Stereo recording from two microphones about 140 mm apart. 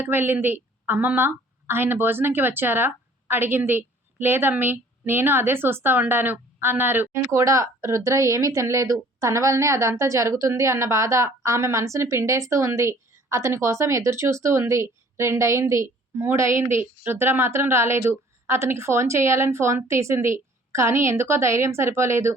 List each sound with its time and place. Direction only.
0.0 s a woman's voice: 15° right (ahead or behind)